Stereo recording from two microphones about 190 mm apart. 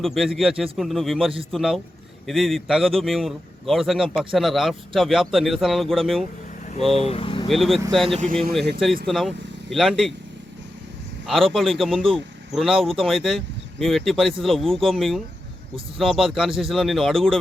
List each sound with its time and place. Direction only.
0.0 s speech: centre (ahead or behind)
7.0 s speech: 30° left (ahead or behind)
7.4 s speech: centre (ahead or behind)
11.3 s speech: centre (ahead or behind)